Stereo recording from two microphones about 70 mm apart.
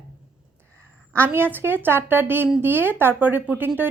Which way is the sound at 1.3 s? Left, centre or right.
Right.